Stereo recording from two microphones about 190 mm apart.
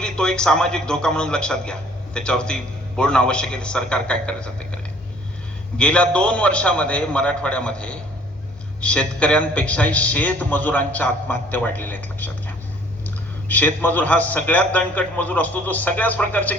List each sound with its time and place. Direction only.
0.0 s a man's voice: 5° left (ahead or behind)
5.7 s a man's voice: 5° left (ahead or behind)